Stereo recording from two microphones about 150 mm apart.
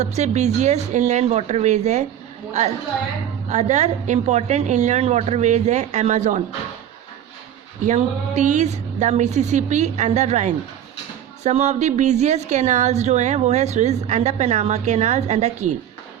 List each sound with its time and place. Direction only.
0.0 s a woman's voice: 50° right (ahead or behind)
7.9 s a woman's voice: 50° right (ahead or behind)